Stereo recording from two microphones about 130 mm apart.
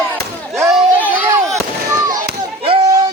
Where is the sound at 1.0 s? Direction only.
15° right (ahead or behind).